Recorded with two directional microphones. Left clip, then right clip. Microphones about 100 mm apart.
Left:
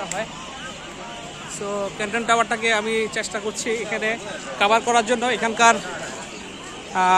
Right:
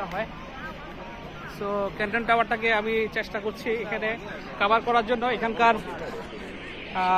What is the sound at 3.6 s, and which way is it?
Speech, 60° left (ahead or behind).